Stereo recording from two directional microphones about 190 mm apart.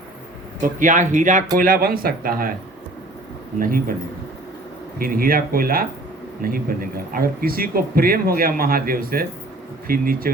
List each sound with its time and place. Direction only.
0.6 s speech: 45° right (ahead or behind)
3.6 s speech: 50° right (ahead or behind)
4.9 s speech: 50° right (ahead or behind)